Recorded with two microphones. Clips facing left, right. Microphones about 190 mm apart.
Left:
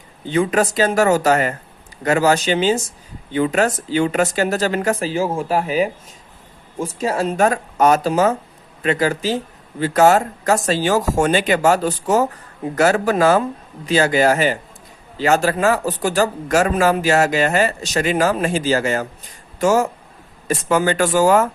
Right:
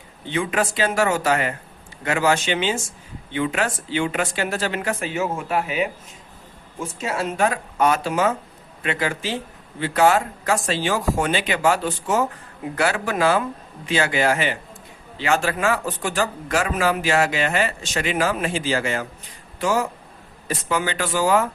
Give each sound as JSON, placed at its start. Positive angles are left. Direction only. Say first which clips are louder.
{"t": 0.3, "sound": "speech", "louder": "left 6 dB", "side_deg": 40}